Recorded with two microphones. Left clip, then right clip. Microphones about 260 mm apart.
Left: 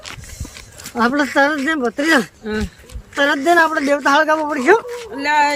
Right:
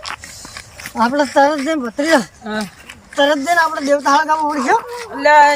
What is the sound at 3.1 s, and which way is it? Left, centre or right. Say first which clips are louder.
Speech: even; centre.